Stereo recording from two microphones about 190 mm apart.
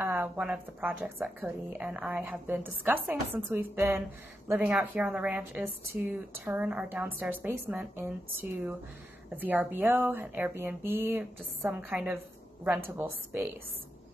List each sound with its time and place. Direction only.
0.0 s a woman's voice: 10° right (ahead or behind)